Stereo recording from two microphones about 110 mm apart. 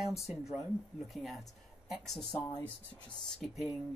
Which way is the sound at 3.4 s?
Centre (ahead or behind).